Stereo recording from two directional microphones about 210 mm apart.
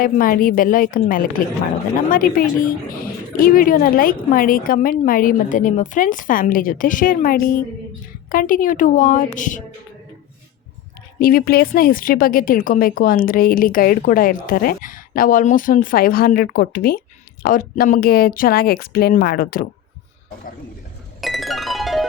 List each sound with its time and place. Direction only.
0.0 s speech: 40° left (ahead or behind)
11.2 s speech: 45° left (ahead or behind)
21.2 s music: centre (ahead or behind)